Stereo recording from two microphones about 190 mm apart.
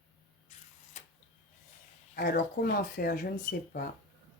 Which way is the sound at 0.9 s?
35° left (ahead or behind).